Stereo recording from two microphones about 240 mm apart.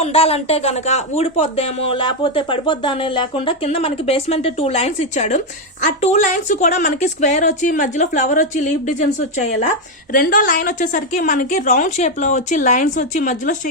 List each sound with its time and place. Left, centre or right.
0.0 s a woman's voice: left